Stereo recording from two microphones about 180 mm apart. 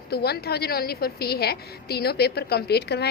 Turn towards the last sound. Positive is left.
turn(degrees=65)  # may be behind; listen again after turning